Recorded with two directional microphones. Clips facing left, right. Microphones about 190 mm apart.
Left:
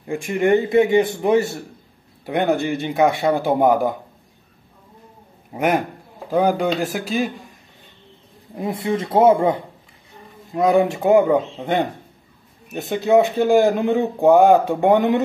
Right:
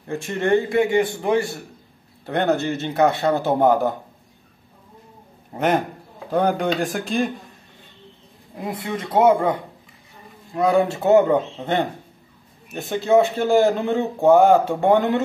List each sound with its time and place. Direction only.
0.0 s a man's voice: 15° left (ahead or behind)
5.5 s a man's voice: 10° left (ahead or behind)
8.5 s a man's voice: 25° left (ahead or behind)